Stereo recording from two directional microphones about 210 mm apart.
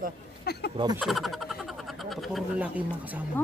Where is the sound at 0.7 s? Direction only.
20° right (ahead or behind).